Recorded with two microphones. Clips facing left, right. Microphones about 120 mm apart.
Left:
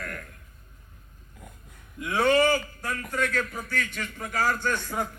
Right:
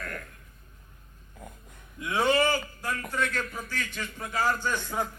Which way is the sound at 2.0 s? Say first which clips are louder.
Left 3 dB; 15° right (ahead or behind).